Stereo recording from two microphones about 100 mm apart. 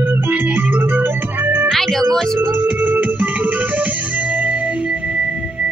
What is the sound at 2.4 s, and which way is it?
Music, 20° right (ahead or behind).